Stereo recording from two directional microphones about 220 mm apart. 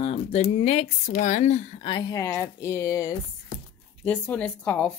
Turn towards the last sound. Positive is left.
turn(degrees=5)  # may be behind; listen again after turning